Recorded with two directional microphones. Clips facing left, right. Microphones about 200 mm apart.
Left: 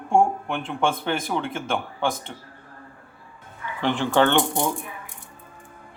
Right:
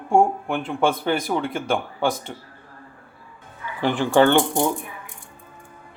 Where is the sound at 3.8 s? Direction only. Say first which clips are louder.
Right 3 dB; 10° right (ahead or behind).